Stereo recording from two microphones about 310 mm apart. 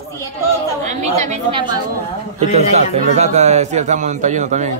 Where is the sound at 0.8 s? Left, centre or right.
Right.